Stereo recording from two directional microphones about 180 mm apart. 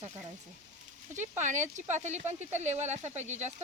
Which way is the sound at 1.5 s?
45° right (ahead or behind).